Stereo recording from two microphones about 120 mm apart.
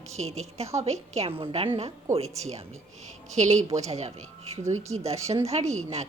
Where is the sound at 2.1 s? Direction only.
65° right (ahead or behind).